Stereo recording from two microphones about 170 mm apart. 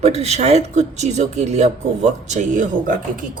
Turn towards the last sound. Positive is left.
turn(degrees=-50)  # may be behind; listen again after turning